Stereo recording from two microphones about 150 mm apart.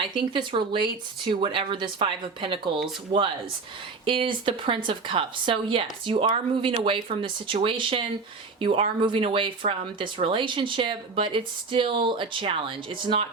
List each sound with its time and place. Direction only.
0.0 s speech: 35° right (ahead or behind)
4.0 s speech: 35° right (ahead or behind)